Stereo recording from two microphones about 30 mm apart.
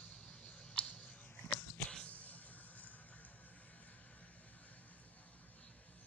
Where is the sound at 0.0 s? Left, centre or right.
Left.